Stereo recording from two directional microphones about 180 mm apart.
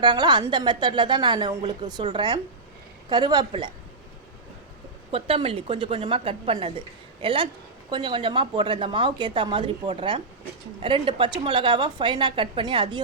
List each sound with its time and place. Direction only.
0.0 s a woman's voice: 25° right (ahead or behind)
5.1 s a woman's voice: 30° right (ahead or behind)